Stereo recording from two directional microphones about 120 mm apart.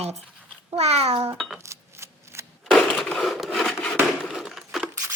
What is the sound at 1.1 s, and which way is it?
Speech, 25° right (ahead or behind).